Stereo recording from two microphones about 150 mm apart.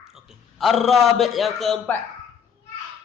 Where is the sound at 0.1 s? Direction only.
Centre (ahead or behind).